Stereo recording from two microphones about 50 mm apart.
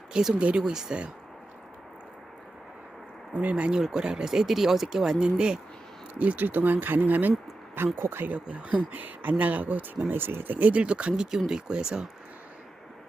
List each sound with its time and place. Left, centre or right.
0.1 s speech: centre
3.3 s speech: right
6.1 s speech: right
7.9 s speech: right
8.4 s speech: right
10.1 s speech: right
11.4 s speech: centre